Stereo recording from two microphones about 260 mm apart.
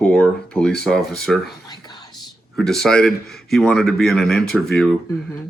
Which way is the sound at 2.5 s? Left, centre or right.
Centre.